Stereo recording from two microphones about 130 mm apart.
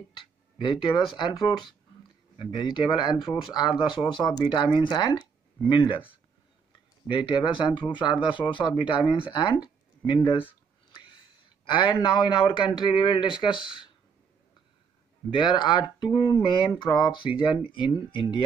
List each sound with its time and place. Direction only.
0.6 s speech: 35° left (ahead or behind)
7.1 s speech: 35° left (ahead or behind)
10.0 s speech: 35° left (ahead or behind)
11.6 s a man's voice: 40° left (ahead or behind)
15.3 s speech: 35° left (ahead or behind)